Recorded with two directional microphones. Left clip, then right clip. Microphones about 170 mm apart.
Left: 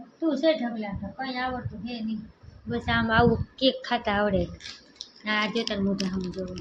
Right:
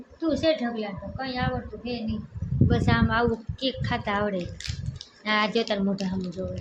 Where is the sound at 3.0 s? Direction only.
15° left (ahead or behind).